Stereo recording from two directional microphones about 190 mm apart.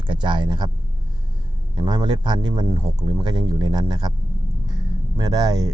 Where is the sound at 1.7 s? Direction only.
25° right (ahead or behind).